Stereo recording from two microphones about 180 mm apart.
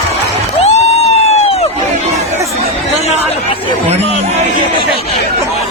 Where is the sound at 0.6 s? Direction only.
35° left (ahead or behind).